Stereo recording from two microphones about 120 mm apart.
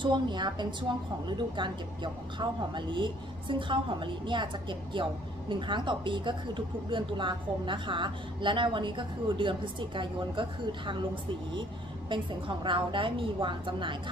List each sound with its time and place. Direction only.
0.0 s a woman's voice: 40° right (ahead or behind)
12.1 s a woman's voice: 45° right (ahead or behind)